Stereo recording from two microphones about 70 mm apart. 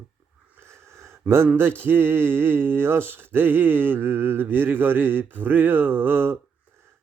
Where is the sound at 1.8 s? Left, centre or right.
Right.